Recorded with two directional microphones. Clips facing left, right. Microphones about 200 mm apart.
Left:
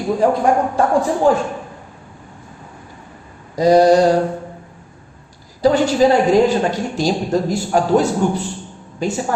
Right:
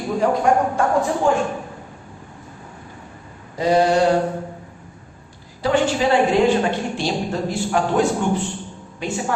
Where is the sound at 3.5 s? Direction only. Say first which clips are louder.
Left 6 dB; 40° left (ahead or behind).